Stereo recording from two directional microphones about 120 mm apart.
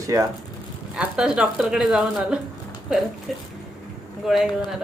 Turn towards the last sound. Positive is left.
turn(degrees=-5)  # may be behind; listen again after turning